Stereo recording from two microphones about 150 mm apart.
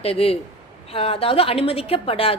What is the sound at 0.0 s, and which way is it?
A woman's voice, 40° left (ahead or behind).